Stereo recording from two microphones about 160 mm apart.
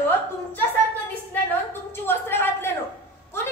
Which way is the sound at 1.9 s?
15° left (ahead or behind).